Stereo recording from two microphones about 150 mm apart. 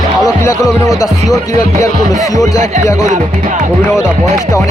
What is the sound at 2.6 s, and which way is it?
Speech, 55° right (ahead or behind).